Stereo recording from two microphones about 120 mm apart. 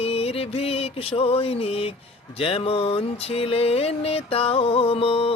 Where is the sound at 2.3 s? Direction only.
50° left (ahead or behind).